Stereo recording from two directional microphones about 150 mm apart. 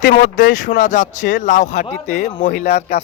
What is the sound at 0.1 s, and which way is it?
A man's voice, 65° left (ahead or behind).